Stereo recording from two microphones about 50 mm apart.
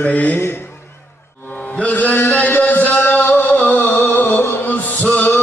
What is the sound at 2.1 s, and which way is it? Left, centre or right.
Speech, left.